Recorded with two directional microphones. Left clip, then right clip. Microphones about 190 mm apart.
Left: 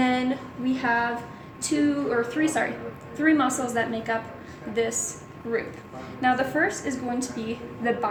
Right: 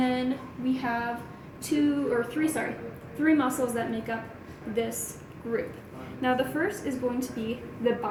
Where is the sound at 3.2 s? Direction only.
20° left (ahead or behind).